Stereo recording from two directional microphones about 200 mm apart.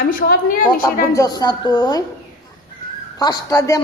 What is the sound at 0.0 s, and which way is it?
Speech, 45° left (ahead or behind).